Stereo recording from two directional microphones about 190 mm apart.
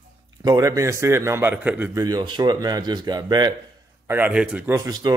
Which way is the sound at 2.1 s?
20° right (ahead or behind).